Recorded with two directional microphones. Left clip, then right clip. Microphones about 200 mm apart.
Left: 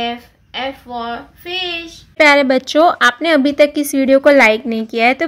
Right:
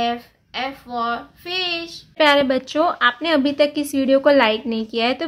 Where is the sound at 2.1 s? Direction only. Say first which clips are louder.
Left 5 dB; 25° left (ahead or behind).